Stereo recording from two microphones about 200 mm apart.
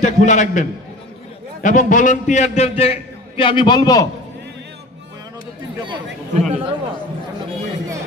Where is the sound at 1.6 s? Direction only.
40° left (ahead or behind); by 4.1 s 20° left (ahead or behind).